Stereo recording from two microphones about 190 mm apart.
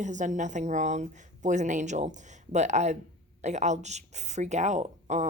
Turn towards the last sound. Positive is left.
turn(degrees=-40)  # may be behind; listen again after turning